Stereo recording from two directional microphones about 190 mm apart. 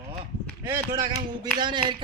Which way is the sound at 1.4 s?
25° right (ahead or behind).